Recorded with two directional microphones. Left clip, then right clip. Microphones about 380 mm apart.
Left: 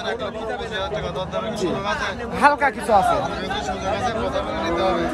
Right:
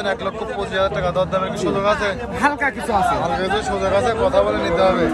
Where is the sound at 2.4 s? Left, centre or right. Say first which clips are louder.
Left 2 dB; left.